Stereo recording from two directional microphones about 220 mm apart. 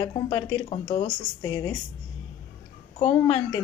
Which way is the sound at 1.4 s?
15° left (ahead or behind).